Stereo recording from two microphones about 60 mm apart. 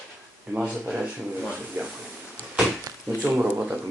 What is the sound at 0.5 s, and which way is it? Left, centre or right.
Speech, centre.